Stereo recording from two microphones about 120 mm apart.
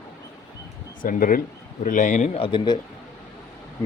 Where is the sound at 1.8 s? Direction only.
90° left.